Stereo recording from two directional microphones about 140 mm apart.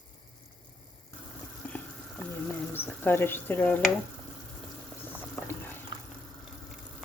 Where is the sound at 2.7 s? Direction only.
15° left (ahead or behind).